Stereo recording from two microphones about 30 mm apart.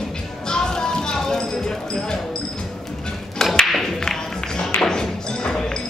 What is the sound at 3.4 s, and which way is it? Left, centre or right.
Tap, centre.